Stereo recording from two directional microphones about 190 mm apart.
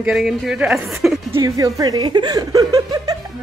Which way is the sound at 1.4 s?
20° right (ahead or behind).